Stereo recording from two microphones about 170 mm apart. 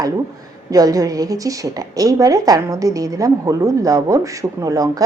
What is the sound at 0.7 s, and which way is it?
A woman's voice, 20° right (ahead or behind).